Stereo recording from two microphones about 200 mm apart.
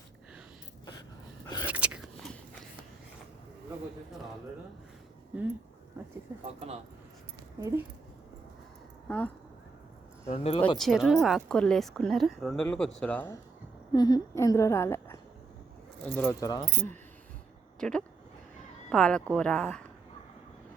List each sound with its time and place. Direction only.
1.6 s whispering: 5° right (ahead or behind)
5.3 s a woman's voice: 5° right (ahead or behind)
9.0 s speech: 5° left (ahead or behind)
10.2 s speech: 30° left (ahead or behind)
10.8 s a woman's voice: centre (ahead or behind); by 16.9 s 20° left (ahead or behind)
17.7 s a woman's voice: 5° left (ahead or behind)